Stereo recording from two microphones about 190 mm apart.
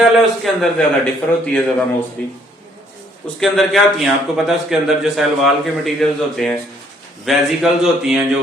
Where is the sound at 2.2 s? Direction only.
5° left (ahead or behind).